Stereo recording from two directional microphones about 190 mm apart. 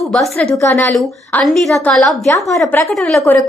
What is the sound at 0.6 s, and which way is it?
Speech, 15° left (ahead or behind).